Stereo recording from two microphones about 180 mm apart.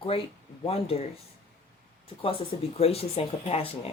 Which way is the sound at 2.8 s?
35° left (ahead or behind).